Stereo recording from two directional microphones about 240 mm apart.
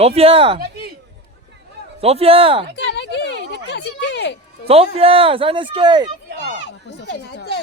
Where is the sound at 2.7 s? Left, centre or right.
Left.